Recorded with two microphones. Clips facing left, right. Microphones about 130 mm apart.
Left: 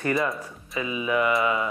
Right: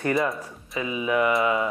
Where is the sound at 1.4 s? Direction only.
25° right (ahead or behind).